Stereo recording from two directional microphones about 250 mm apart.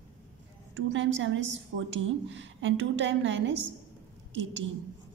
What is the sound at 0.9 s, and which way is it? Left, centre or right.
A woman's voice, right.